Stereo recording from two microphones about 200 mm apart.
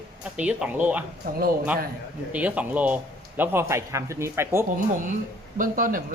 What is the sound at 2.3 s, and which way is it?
Speech, 5° right (ahead or behind).